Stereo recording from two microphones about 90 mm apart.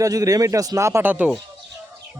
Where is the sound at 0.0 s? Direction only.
40° right (ahead or behind).